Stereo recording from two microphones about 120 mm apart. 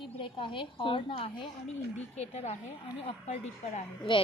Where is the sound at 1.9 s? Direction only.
65° left (ahead or behind).